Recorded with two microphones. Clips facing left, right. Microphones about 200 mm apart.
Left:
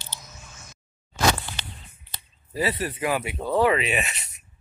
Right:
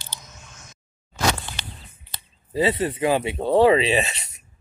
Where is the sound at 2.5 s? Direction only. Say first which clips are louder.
Right 5 dB; 25° right (ahead or behind).